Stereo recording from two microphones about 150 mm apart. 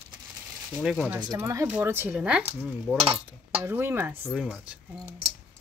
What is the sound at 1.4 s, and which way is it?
Speech, 20° right (ahead or behind).